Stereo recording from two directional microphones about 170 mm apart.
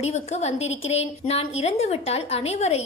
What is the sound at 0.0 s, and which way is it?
A woman's voice, 40° left (ahead or behind).